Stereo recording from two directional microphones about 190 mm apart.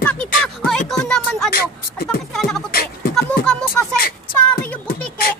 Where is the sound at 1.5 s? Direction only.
55° left (ahead or behind).